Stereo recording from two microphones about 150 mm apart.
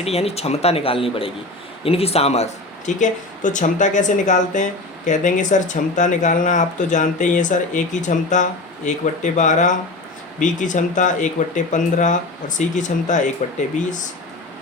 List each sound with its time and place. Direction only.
0.0 s speech: 40° left (ahead or behind)